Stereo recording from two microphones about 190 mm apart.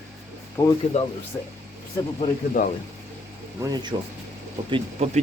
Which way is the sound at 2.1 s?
40° left (ahead or behind).